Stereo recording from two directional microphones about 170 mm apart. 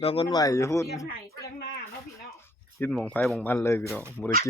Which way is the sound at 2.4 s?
10° left (ahead or behind).